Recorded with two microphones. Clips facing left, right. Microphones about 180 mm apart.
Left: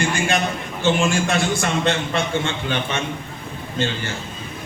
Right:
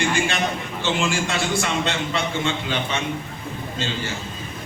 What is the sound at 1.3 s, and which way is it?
A man's voice, 50° left (ahead or behind).